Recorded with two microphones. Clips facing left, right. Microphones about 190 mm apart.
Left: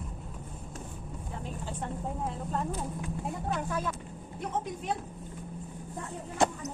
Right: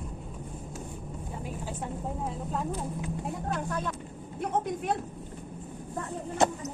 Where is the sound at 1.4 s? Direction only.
5° right (ahead or behind).